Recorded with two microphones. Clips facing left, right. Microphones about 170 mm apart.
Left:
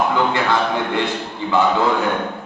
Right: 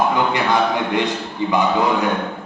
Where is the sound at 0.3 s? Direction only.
15° right (ahead or behind).